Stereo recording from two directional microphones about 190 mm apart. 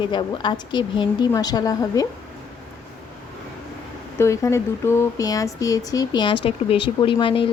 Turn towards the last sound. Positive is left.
turn(degrees=25)  # may be behind; listen again after turning